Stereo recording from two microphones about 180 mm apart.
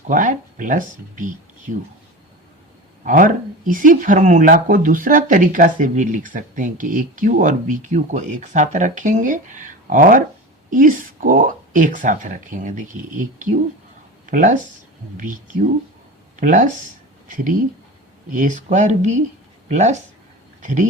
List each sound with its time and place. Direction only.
0.1 s speech: 45° right (ahead or behind)
3.0 s speech: 50° right (ahead or behind)